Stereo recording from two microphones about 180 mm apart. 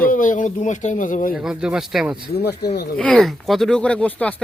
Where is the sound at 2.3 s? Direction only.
65° left (ahead or behind).